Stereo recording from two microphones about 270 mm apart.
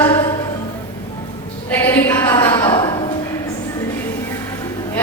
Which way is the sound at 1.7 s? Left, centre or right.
Centre.